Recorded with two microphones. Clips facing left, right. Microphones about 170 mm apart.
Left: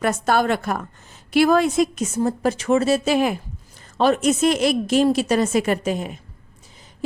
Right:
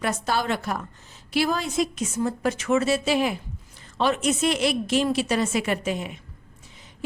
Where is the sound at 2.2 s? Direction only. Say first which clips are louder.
Left 4 dB; 35° left (ahead or behind).